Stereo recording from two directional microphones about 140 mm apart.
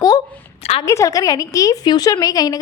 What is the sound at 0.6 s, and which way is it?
Speech, 45° left (ahead or behind).